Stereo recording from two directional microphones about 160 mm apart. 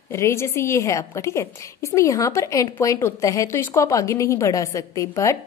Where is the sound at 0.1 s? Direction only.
15° left (ahead or behind).